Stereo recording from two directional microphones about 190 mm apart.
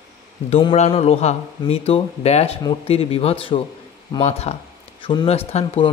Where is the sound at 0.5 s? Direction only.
30° left (ahead or behind).